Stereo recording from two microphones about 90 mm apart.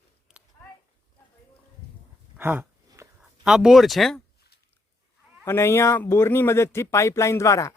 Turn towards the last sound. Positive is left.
turn(degrees=35)  # may be behind; listen again after turning